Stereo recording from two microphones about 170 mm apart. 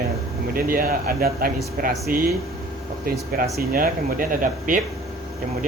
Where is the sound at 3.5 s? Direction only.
55° right (ahead or behind).